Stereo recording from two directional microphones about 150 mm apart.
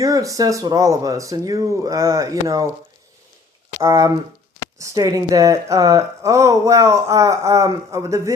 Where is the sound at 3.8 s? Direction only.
20° right (ahead or behind).